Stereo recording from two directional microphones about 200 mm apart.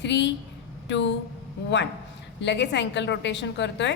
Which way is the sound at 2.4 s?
60° left (ahead or behind).